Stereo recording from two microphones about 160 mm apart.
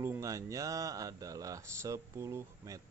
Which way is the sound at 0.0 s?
20° right (ahead or behind).